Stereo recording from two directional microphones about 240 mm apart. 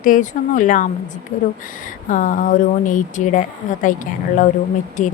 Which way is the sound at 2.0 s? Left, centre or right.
Left.